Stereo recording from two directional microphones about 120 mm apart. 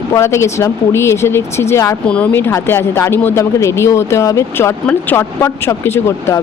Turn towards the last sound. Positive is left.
turn(degrees=25)  # may be behind; listen again after turning